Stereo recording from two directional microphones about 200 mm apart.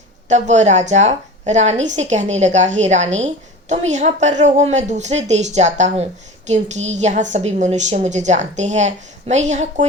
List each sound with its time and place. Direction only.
0.3 s a woman's voice: 35° right (ahead or behind)